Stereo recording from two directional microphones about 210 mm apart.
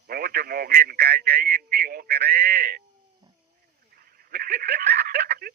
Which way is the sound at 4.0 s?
45° right (ahead or behind).